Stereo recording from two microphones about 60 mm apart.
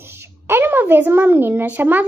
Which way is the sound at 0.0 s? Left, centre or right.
Right.